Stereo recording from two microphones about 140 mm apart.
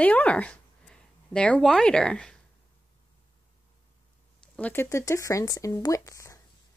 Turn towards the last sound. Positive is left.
turn(degrees=20)  # may be behind; listen again after turning